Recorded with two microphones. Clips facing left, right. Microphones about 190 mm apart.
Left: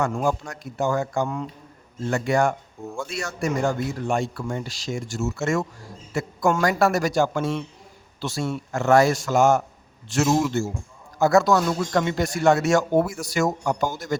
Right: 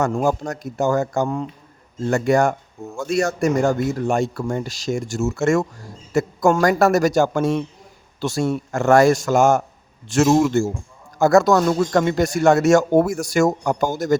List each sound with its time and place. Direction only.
0.0 s speech: 40° right (ahead or behind)